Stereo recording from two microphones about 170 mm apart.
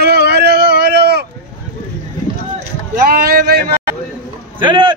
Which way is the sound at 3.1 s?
60° right (ahead or behind).